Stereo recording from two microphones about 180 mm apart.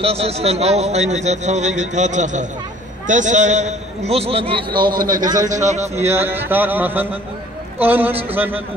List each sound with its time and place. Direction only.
0.0 s a man's voice: 35° right (ahead or behind)
5.5 s speech: 40° right (ahead or behind)
6.0 s a man's voice: 10° right (ahead or behind)
8.1 s speech: 30° right (ahead or behind)